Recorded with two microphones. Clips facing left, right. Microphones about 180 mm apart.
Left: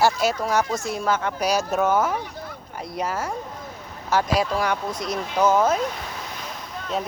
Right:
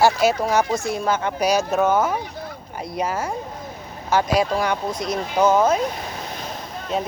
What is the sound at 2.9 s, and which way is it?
Speech, centre (ahead or behind).